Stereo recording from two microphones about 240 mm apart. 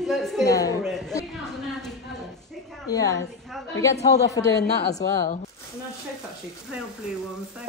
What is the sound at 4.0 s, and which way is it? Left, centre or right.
Speech, left.